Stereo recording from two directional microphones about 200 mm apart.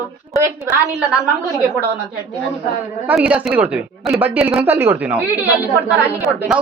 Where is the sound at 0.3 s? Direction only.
10° right (ahead or behind).